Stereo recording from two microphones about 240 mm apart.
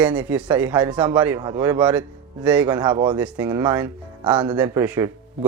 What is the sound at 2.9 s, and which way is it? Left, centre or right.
Speech, centre.